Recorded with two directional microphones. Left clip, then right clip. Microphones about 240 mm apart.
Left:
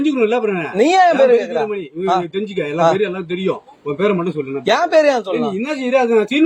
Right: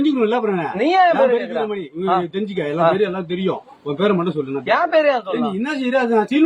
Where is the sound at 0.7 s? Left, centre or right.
Left.